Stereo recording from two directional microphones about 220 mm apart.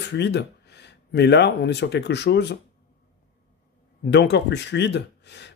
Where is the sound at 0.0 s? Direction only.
50° left (ahead or behind).